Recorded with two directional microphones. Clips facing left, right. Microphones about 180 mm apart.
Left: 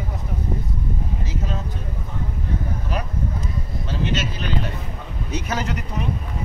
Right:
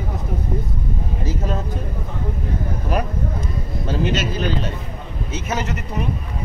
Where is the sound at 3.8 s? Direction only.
45° right (ahead or behind).